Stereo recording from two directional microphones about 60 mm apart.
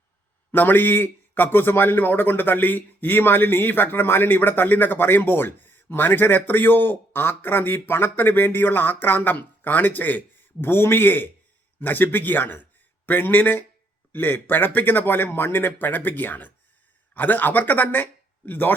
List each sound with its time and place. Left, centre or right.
0.5 s a man's voice: left